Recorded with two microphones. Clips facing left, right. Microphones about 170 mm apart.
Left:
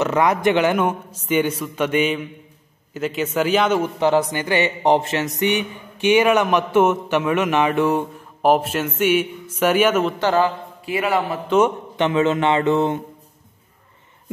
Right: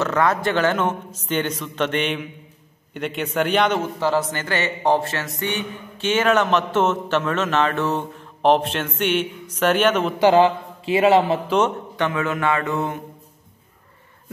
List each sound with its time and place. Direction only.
0.0 s a man's voice: 15° left (ahead or behind)
3.8 s speech: 15° left (ahead or behind)
10.2 s speech: 20° right (ahead or behind)
12.0 s a man's voice: 25° left (ahead or behind)